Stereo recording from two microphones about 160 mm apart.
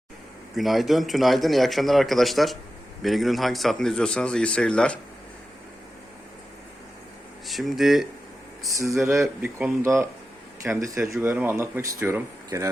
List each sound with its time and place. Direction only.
0.5 s speech: centre (ahead or behind)
7.4 s speech: centre (ahead or behind)
8.6 s speech: 20° right (ahead or behind)
9.0 s speech: centre (ahead or behind); by 12.6 s 15° right (ahead or behind)